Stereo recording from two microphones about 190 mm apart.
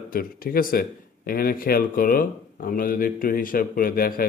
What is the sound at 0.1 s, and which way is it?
Speech, 50° left (ahead or behind).